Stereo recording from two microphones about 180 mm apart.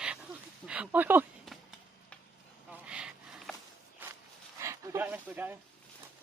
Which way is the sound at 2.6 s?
5° right (ahead or behind).